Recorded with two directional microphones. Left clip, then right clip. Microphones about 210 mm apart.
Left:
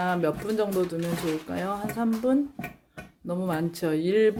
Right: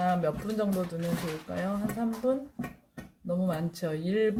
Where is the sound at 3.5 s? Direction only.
25° left (ahead or behind).